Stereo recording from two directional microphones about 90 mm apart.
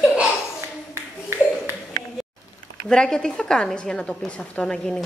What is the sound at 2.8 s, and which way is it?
A woman's voice, 5° left (ahead or behind).